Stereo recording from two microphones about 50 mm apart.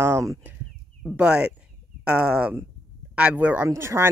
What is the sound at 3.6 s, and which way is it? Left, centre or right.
Speech, right.